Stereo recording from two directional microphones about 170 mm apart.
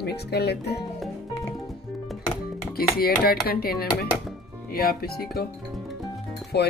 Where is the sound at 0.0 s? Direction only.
70° left (ahead or behind).